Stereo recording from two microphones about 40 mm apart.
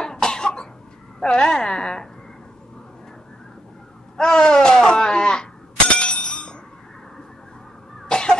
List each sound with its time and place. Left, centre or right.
0.0 s cough: centre
1.2 s a woman's voice: left
4.2 s a sound: centre
8.1 s cough: centre